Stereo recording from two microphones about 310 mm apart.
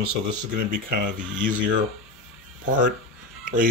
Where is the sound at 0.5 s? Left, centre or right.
Right.